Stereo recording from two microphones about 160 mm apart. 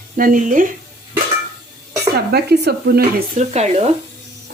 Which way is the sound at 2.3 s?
90° right.